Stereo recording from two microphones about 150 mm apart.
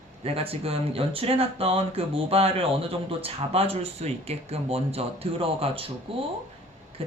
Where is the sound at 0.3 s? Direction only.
40° right (ahead or behind).